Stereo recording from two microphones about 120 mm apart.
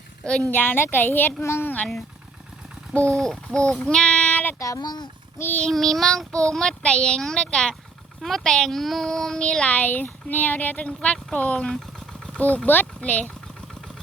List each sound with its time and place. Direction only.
0.5 s speech: 15° left (ahead or behind)
3.2 s child singing: 5° left (ahead or behind)
3.7 s speech: 5° left (ahead or behind)
4.6 s speech: 30° left (ahead or behind)
5.4 s speech: 15° left (ahead or behind)
5.6 s child singing: centre (ahead or behind)
8.2 s speech: 5° left (ahead or behind)